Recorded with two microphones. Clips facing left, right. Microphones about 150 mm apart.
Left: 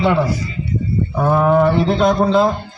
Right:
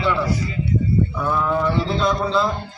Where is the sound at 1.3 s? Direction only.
65° left (ahead or behind).